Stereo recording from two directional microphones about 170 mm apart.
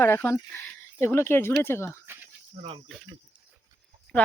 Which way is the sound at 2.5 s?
35° right (ahead or behind).